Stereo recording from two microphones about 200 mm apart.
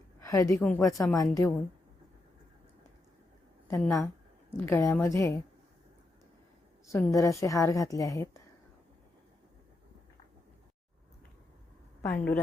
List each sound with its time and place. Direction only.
0.3 s a woman's voice: 15° left (ahead or behind)
3.7 s a woman's voice: 15° left (ahead or behind)
6.9 s a woman's voice: 15° left (ahead or behind)
12.0 s a woman's voice: 5° left (ahead or behind)